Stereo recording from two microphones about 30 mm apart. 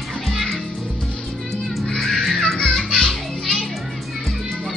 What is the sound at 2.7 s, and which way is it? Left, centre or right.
Children playing, centre.